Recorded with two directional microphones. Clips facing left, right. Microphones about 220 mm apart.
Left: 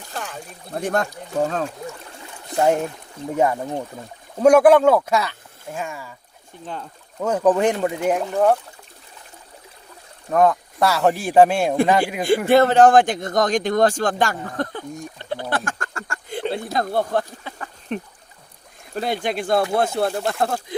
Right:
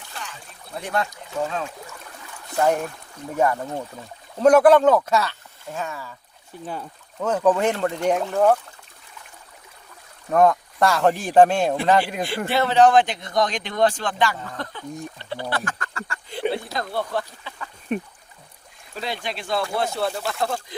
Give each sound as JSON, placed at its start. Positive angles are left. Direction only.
{"t": 0.1, "sound": "speech", "side_deg": 50}
{"t": 2.2, "sound": "trickle", "side_deg": 25}
{"t": 3.3, "sound": "speech", "side_deg": 20}
{"t": 7.2, "sound": "speech", "side_deg": 10}
{"t": 10.3, "sound": "speech", "side_deg": 0}
{"t": 12.5, "sound": "a man's voice", "side_deg": 50}
{"t": 17.9, "sound": "speech", "side_deg": -10}
{"t": 18.9, "sound": "a man's voice", "side_deg": 50}